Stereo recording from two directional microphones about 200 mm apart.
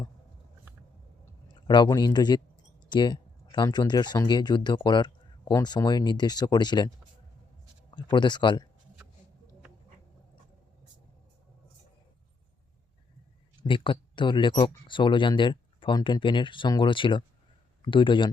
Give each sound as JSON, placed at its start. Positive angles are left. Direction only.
{"t": 1.6, "sound": "speech", "side_deg": 20}
{"t": 13.6, "sound": "speech", "side_deg": 25}